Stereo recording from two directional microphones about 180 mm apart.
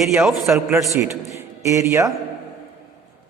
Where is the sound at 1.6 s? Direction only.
15° right (ahead or behind).